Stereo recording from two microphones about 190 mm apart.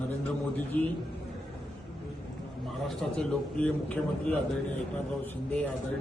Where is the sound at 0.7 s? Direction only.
5° left (ahead or behind).